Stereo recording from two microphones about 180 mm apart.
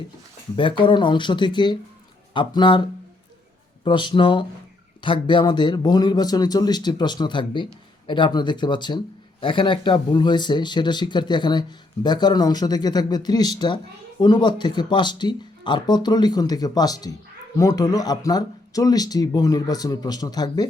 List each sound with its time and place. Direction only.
0.5 s speech: 25° left (ahead or behind)
3.8 s speech: 25° left (ahead or behind)